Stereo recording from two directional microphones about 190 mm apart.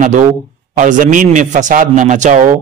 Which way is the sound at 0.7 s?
45° right (ahead or behind).